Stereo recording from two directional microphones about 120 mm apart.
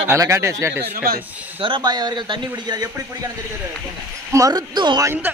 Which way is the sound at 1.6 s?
40° right (ahead or behind).